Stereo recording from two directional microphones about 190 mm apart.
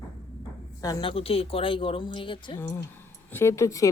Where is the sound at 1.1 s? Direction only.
30° left (ahead or behind).